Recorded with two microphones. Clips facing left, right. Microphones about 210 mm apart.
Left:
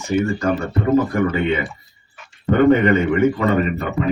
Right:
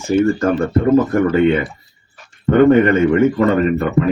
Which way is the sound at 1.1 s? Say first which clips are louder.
Right 5 dB; 40° right (ahead or behind).